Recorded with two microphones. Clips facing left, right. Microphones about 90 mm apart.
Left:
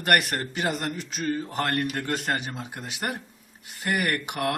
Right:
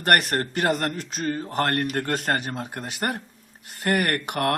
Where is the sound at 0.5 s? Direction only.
55° right (ahead or behind).